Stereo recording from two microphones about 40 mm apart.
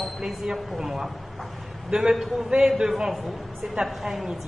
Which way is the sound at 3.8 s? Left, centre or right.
Centre.